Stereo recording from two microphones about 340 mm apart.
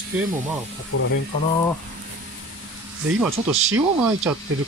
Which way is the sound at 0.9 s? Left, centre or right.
Left.